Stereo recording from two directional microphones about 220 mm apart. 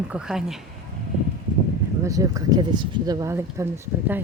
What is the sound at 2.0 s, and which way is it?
Speech, 15° right (ahead or behind).